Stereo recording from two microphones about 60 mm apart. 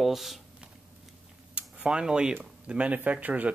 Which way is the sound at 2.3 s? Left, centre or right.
Right.